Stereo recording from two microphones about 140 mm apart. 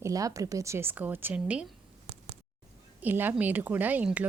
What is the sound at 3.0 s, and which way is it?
A woman's voice, 15° right (ahead or behind).